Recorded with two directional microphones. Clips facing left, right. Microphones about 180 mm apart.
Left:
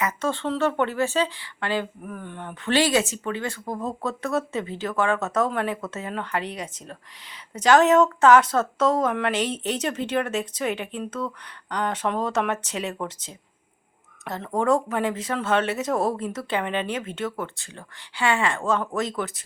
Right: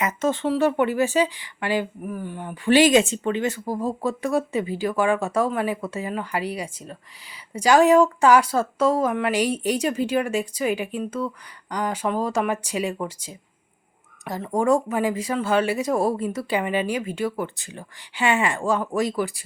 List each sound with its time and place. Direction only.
0.0 s speech: 15° right (ahead or behind)
2.9 s speech: 25° right (ahead or behind)
3.3 s speech: 15° right (ahead or behind)